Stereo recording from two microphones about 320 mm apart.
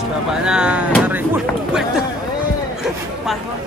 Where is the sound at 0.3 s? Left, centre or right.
Centre.